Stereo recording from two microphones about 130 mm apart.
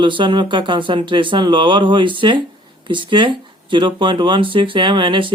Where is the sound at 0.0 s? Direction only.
40° right (ahead or behind).